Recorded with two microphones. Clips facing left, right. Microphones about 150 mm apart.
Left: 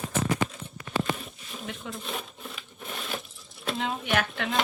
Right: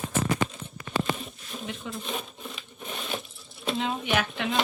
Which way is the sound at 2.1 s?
15° right (ahead or behind).